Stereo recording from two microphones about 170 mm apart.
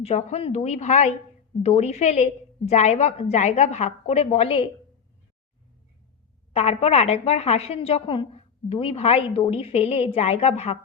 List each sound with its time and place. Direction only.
0.0 s a woman's voice: 40° left (ahead or behind)
6.5 s a woman's voice: 35° left (ahead or behind)